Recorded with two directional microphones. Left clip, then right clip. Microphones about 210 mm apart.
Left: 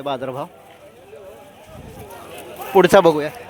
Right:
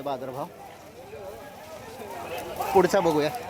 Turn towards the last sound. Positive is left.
turn(degrees=20)  # may be behind; listen again after turning